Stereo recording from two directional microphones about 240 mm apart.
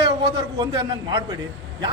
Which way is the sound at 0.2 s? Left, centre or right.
Centre.